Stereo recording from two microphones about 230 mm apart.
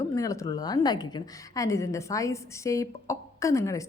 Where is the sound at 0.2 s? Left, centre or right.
Centre.